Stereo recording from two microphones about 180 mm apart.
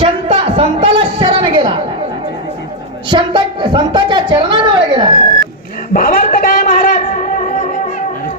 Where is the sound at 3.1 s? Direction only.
25° right (ahead or behind).